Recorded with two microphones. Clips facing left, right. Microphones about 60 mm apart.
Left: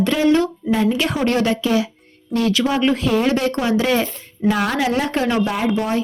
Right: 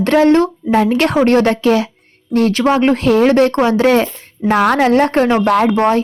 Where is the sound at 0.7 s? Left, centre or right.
Right.